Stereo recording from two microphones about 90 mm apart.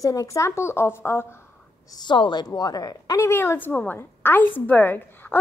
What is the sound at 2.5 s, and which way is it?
A woman's voice, 45° left (ahead or behind).